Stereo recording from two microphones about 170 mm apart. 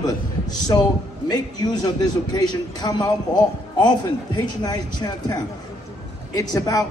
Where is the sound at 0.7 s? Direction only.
25° left (ahead or behind).